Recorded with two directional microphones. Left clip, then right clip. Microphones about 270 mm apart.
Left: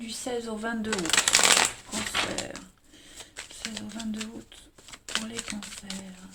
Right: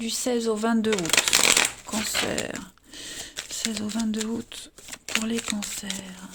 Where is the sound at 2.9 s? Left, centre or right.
Right.